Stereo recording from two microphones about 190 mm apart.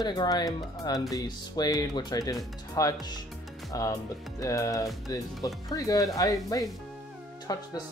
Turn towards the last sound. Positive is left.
turn(degrees=20)  # may be behind; listen again after turning